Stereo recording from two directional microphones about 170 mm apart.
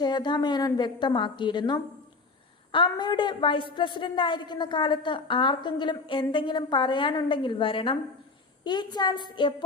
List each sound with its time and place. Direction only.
0.0 s a woman's voice: 25° left (ahead or behind)